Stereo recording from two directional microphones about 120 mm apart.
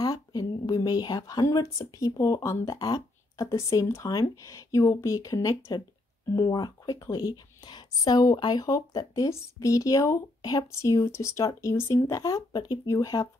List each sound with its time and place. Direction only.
0.0 s speech: 30° left (ahead or behind)